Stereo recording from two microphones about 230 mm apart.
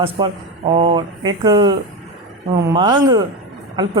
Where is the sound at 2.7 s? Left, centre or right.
Centre.